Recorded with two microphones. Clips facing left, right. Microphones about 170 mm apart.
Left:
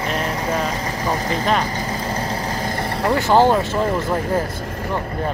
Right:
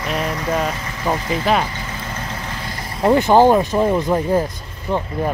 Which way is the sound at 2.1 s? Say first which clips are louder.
Left 5 dB; 35° left (ahead or behind).